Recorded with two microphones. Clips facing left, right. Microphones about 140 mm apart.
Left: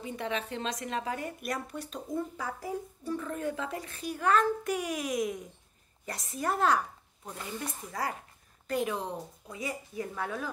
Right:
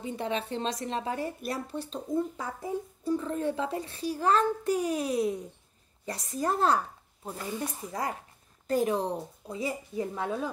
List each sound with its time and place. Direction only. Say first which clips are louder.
0.0 s a child's voice: right 2 dB; 30° right (ahead or behind)
7.5 s a woman's voice: right 2 dB; 25° right (ahead or behind)
8.6 s a woman's voice: right 5 dB; 35° right (ahead or behind)